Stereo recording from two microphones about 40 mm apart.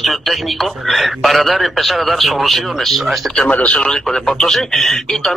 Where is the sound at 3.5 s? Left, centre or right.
Left.